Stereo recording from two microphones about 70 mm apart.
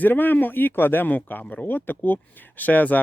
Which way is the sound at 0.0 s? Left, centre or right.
Left.